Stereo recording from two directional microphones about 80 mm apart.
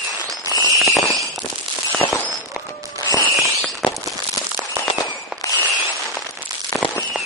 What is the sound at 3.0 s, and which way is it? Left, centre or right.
Music, left.